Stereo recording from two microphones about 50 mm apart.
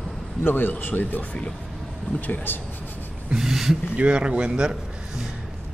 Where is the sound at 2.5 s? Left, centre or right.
Left.